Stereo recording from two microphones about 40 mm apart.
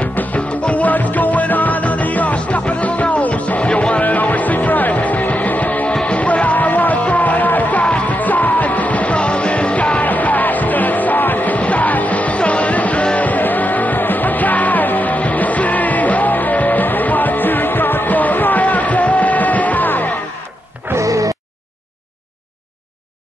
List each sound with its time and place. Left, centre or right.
0.1 s music: left
0.5 s music: left
0.8 s music: left
4.0 s music: left
10.0 s music: left
13.2 s music: left
20.9 s music: right